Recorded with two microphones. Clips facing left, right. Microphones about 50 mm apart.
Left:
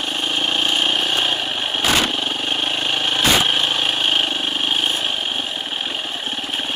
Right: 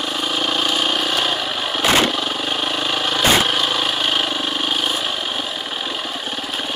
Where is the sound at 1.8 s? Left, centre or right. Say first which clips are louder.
Right 3 dB; centre.